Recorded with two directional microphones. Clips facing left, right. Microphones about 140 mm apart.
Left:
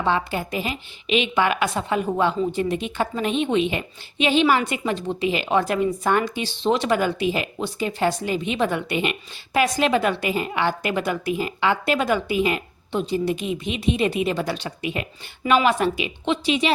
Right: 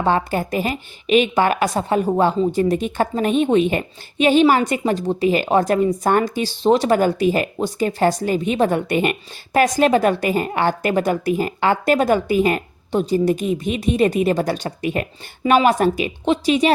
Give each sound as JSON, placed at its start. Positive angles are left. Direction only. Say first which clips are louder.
{"t": 0.0, "sound": "a woman's voice", "louder": "right 4 dB", "side_deg": -45}